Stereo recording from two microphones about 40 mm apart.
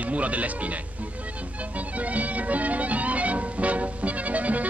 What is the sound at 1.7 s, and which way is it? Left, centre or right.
Music, right.